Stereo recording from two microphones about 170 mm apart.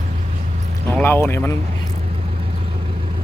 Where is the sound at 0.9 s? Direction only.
10° left (ahead or behind).